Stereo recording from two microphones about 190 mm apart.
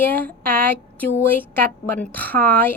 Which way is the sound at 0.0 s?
10° left (ahead or behind).